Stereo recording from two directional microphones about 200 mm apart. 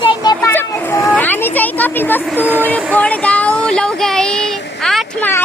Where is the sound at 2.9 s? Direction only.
5° left (ahead or behind).